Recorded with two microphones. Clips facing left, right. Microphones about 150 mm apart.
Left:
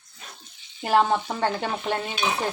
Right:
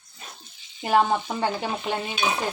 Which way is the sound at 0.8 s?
Centre (ahead or behind).